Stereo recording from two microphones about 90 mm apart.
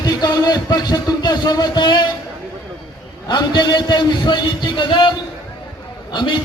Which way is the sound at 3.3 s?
55° left (ahead or behind).